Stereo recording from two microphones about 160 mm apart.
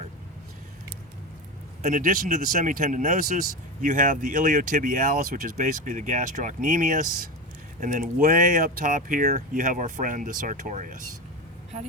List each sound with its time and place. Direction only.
1.8 s speech: 55° right (ahead or behind)